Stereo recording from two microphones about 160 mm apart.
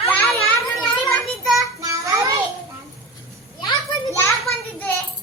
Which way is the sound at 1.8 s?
20° right (ahead or behind).